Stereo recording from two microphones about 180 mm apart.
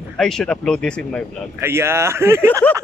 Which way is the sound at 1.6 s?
15° right (ahead or behind).